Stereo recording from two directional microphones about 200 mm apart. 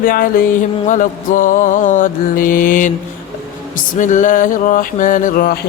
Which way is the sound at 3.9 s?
40° left (ahead or behind).